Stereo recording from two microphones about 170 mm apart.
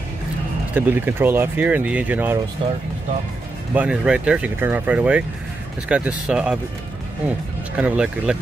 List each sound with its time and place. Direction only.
0.7 s speech: 10° right (ahead or behind)
2.6 s speech: 30° right (ahead or behind)
3.7 s speech: 5° right (ahead or behind)
7.7 s speech: 5° right (ahead or behind)